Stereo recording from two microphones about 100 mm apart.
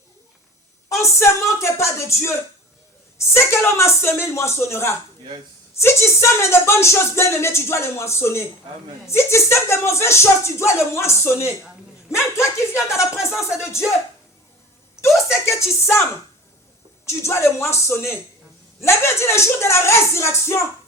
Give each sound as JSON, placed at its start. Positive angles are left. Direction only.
{"t": 0.9, "sound": "speech", "side_deg": 30}
{"t": 15.1, "sound": "speech", "side_deg": 0}
{"t": 15.5, "sound": "speech", "side_deg": 25}
{"t": 17.1, "sound": "speech", "side_deg": 30}